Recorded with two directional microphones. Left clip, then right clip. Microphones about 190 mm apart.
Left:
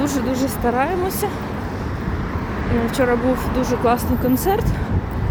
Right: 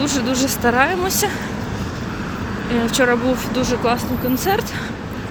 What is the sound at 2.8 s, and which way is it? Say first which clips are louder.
Speech: right 2 dB; 10° left (ahead or behind).